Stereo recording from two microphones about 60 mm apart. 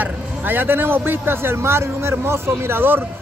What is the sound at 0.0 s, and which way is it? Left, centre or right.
A man's voice, right.